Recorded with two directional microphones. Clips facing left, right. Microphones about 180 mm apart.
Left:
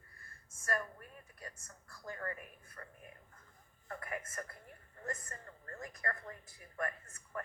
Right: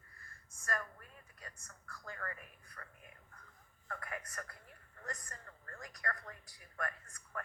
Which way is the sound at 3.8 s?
25° left (ahead or behind).